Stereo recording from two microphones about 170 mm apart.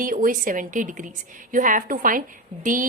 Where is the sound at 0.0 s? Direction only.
55° right (ahead or behind).